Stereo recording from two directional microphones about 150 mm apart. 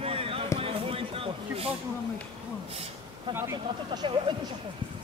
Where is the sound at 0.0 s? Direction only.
40° right (ahead or behind).